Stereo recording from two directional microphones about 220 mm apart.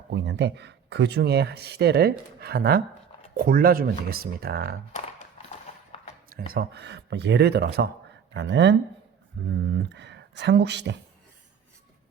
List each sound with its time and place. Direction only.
0.1 s speech: 55° right (ahead or behind)
4.9 s a sound: 35° left (ahead or behind)
6.5 s speech: 45° right (ahead or behind)